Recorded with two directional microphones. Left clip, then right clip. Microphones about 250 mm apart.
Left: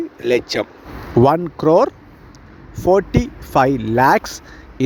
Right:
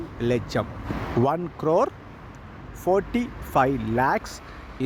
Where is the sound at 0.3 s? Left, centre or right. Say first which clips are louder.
Left 8 dB; left.